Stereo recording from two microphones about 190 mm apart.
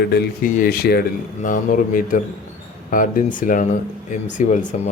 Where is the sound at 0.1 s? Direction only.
55° left (ahead or behind).